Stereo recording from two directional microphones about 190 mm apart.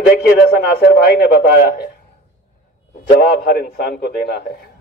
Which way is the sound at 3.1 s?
55° left (ahead or behind).